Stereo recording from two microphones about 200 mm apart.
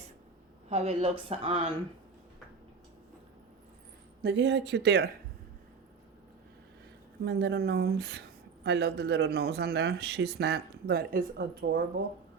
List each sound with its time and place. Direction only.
0.7 s a woman's voice: 30° right (ahead or behind)
4.2 s speech: 60° right (ahead or behind)
7.3 s speech: 55° right (ahead or behind)